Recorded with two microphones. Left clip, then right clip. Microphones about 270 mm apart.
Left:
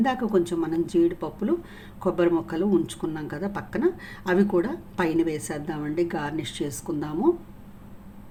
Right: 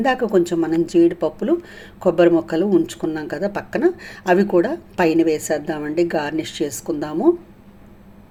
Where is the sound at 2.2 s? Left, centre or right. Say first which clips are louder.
Right 7 dB; centre.